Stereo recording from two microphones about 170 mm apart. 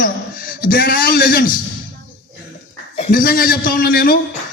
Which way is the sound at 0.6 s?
60° left (ahead or behind).